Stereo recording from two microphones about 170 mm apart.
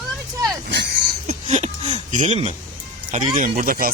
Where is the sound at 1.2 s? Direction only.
40° right (ahead or behind).